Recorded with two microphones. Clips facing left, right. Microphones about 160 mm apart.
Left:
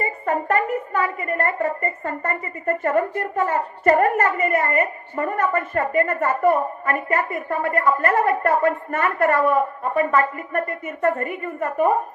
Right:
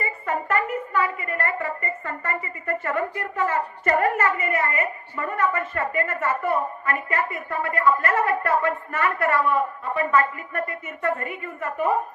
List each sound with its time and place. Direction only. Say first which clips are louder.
0.0 s a woman's voice: left 4 dB; 45° left (ahead or behind)